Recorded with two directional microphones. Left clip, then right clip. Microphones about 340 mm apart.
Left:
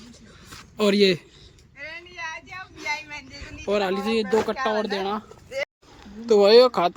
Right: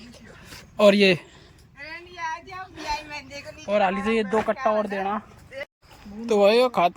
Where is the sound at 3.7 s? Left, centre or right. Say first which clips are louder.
Right 2 dB; centre.